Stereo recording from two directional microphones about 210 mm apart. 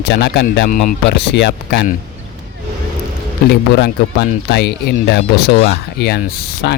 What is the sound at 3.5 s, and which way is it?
Speech, 50° left (ahead or behind).